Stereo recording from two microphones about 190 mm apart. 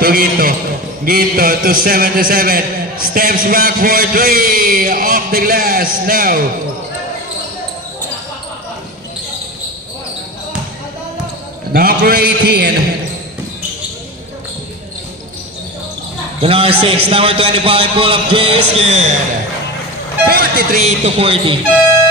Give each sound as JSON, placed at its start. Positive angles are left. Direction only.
{"t": 0.0, "sound": "a man's voice", "side_deg": -50}
{"t": 11.7, "sound": "a man's voice", "side_deg": -50}
{"t": 16.3, "sound": "a man's voice", "side_deg": -30}
{"t": 20.2, "sound": "vehicle", "side_deg": -55}
{"t": 20.8, "sound": "speech", "side_deg": -30}